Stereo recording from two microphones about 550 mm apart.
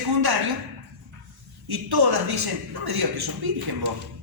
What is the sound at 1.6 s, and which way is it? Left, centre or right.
A man's voice, right.